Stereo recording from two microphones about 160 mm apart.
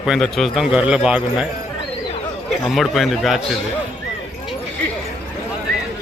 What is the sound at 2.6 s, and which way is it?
Speech, centre (ahead or behind).